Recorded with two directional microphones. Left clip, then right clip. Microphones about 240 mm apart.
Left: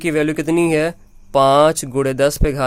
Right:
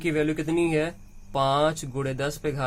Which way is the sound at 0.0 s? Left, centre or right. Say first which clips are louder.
Left 8 dB; left.